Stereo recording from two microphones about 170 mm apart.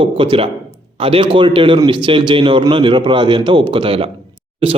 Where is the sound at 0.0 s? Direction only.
30° right (ahead or behind).